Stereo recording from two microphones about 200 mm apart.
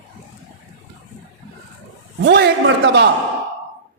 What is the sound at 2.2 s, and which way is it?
Speech, 60° right (ahead or behind).